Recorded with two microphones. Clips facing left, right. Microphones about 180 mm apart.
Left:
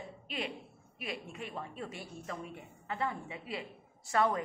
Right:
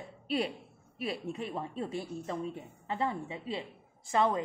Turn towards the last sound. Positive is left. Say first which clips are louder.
# right 2 dB
turn(degrees=-25)  # may be behind; listen again after turning